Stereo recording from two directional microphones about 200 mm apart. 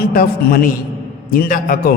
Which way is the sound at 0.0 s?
45° left (ahead or behind).